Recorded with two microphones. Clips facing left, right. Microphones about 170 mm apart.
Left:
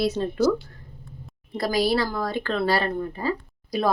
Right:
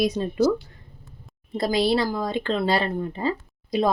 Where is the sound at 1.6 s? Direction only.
25° right (ahead or behind).